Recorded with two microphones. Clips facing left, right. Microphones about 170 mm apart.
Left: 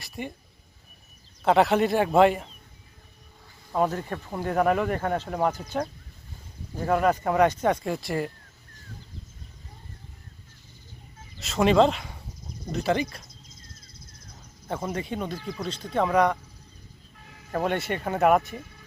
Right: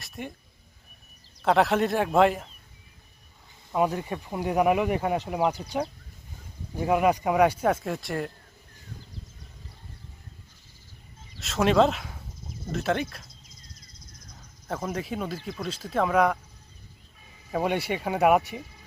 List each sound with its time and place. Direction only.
0.0 s speech: centre (ahead or behind)
1.4 s speech: centre (ahead or behind)
3.8 s speech: 10° right (ahead or behind)
11.3 s speech: centre (ahead or behind)
14.9 s speech: 5° right (ahead or behind)
17.5 s speech: 10° right (ahead or behind)